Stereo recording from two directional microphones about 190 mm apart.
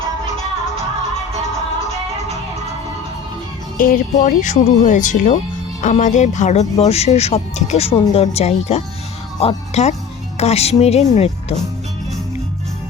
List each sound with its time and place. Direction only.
3.8 s speech: 45° left (ahead or behind)